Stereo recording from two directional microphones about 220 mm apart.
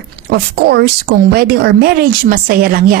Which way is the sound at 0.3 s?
45° right (ahead or behind).